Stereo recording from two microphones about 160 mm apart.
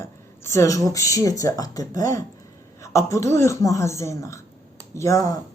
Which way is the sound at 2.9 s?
20° left (ahead or behind).